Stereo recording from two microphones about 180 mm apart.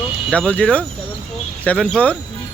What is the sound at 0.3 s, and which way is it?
Speech, 5° left (ahead or behind).